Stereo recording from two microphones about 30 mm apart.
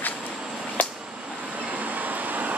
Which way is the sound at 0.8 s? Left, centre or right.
Left.